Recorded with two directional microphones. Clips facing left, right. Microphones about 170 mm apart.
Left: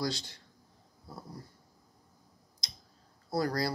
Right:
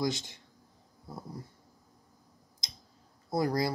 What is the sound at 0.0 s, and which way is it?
Speech, 20° right (ahead or behind).